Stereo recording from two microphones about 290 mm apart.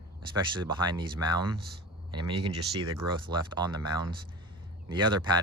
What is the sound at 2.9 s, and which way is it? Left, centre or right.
Speech, centre.